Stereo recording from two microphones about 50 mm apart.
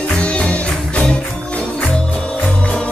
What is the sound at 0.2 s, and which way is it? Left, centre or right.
Music, left.